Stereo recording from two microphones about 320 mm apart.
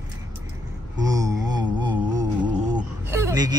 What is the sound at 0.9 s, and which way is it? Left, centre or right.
Mantra, centre.